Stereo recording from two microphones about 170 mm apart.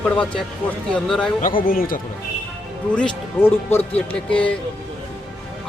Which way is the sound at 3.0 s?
10° left (ahead or behind).